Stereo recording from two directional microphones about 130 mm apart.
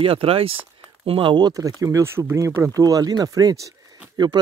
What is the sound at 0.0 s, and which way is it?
Speech, 45° right (ahead or behind).